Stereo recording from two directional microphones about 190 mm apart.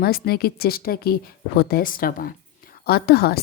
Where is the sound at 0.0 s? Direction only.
55° left (ahead or behind).